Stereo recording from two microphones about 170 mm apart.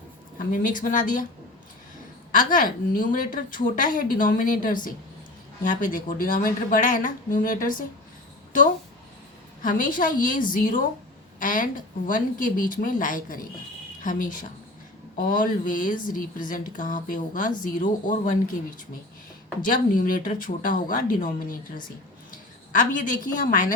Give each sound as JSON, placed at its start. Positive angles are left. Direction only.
{"t": 0.3, "sound": "a woman's voice", "side_deg": 55}
{"t": 2.4, "sound": "a woman's voice", "side_deg": 55}
{"t": 9.6, "sound": "a woman's voice", "side_deg": 50}
{"t": 19.6, "sound": "a woman's voice", "side_deg": 55}
{"t": 22.7, "sound": "a woman's voice", "side_deg": 50}